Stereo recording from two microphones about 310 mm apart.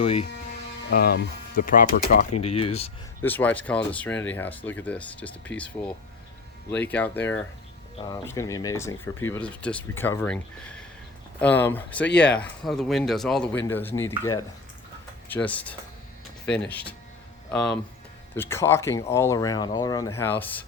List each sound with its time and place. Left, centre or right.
0.0 s speech: centre
0.9 s speech: left
3.2 s speech: centre
15.3 s speech: centre